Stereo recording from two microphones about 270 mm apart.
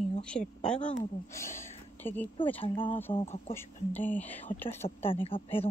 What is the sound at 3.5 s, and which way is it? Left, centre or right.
Speech, centre.